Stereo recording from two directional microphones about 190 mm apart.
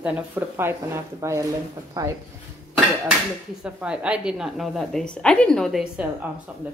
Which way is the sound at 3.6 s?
5° right (ahead or behind).